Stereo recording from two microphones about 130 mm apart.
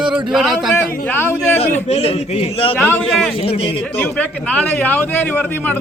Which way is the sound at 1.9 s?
50° left (ahead or behind).